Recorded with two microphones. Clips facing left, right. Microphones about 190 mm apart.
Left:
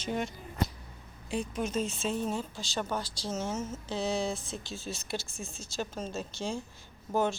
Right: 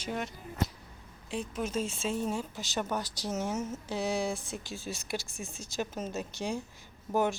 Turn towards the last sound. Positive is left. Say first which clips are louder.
# even
turn(degrees=-15)  # may be behind; listen again after turning